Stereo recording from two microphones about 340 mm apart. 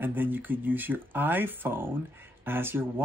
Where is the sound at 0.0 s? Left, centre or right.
Centre.